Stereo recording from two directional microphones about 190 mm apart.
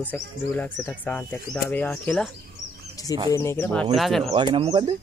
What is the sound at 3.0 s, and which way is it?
Bird, 20° left (ahead or behind).